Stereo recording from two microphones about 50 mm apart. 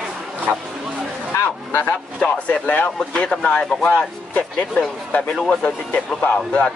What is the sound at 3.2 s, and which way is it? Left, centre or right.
Speech, left.